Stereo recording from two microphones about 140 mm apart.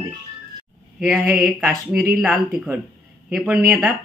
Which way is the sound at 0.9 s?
5° right (ahead or behind).